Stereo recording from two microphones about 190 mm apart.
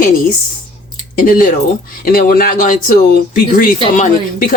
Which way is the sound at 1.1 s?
50° left (ahead or behind).